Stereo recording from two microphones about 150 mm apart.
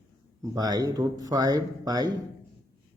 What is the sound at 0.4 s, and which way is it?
Speech, 25° right (ahead or behind).